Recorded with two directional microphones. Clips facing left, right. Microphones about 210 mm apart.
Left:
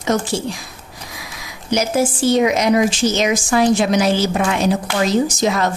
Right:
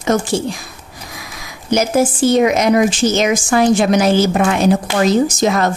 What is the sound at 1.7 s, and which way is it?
A woman's voice, 50° right (ahead or behind).